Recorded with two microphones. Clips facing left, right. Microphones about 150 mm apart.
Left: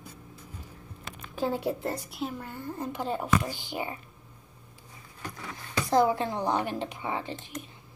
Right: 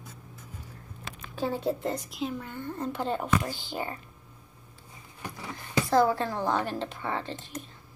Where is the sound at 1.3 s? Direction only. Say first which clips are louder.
Even; 15° left (ahead or behind).